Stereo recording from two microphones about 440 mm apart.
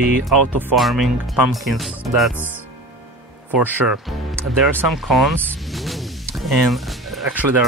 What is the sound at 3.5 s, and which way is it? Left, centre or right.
Speech, centre.